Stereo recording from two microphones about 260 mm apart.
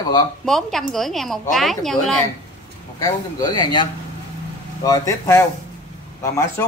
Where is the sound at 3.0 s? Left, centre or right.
Centre.